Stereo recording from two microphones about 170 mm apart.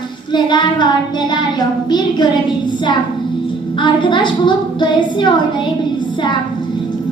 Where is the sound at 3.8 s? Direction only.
30° left (ahead or behind).